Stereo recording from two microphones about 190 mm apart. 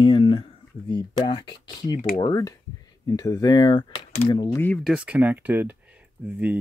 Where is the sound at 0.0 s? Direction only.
25° left (ahead or behind).